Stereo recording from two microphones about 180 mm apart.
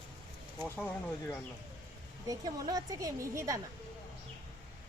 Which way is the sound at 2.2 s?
20° right (ahead or behind).